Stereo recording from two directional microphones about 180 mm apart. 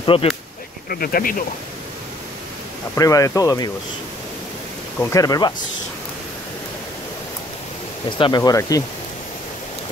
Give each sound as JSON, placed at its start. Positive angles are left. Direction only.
{"t": 0.0, "sound": "speech", "side_deg": 30}
{"t": 0.8, "sound": "speech", "side_deg": 55}
{"t": 3.0, "sound": "speech", "side_deg": 20}
{"t": 5.1, "sound": "speech", "side_deg": 20}
{"t": 8.2, "sound": "speech", "side_deg": 20}